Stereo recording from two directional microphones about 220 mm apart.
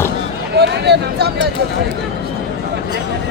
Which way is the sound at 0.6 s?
50° right (ahead or behind).